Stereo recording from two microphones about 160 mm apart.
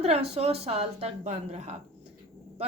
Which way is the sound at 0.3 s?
40° right (ahead or behind).